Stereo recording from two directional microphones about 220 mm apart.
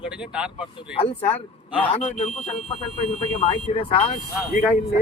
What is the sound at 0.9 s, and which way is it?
Speech, 25° left (ahead or behind).